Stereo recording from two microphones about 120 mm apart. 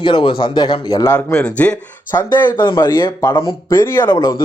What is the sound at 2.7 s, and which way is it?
Speech, 40° left (ahead or behind).